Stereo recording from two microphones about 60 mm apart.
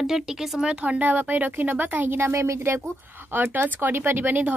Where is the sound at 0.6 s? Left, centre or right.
Right.